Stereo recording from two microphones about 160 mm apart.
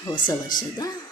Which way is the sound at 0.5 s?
25° left (ahead or behind).